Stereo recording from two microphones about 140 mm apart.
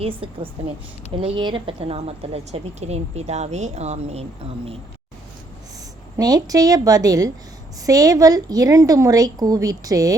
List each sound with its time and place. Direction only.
0.0 s a woman's voice: 40° right (ahead or behind)
6.1 s a woman's voice: 25° right (ahead or behind)